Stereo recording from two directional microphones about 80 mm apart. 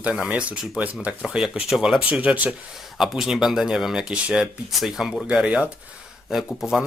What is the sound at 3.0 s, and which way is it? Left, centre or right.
Speech, centre.